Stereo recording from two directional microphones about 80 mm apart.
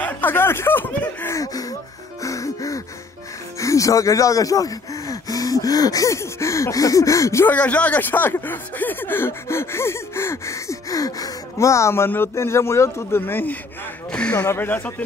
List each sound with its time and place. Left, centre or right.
0.0 s snicker: left
1.3 s a sound: left
2.2 s music: left
3.5 s speech: left
7.4 s speech: centre; by 11.3 s left
11.5 s speech: left